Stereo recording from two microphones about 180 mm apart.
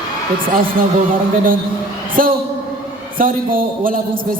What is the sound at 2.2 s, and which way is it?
A man's voice, 50° right (ahead or behind).